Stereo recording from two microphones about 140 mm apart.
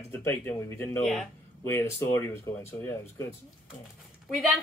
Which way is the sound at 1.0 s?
Centre (ahead or behind).